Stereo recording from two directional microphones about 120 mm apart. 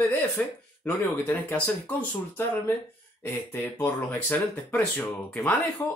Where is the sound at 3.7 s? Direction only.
15° left (ahead or behind).